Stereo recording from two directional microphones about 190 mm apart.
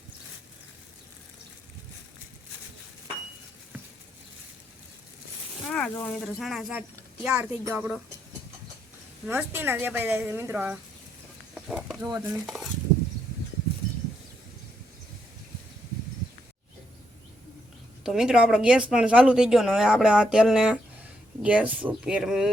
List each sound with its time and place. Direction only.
5.6 s speech: 5° left (ahead or behind)
9.2 s speech: 10° right (ahead or behind)
11.5 s a sound: 5° right (ahead or behind)
12.0 s speech: 20° right (ahead or behind)
12.3 s speech: centre (ahead or behind)
18.0 s speech: centre (ahead or behind)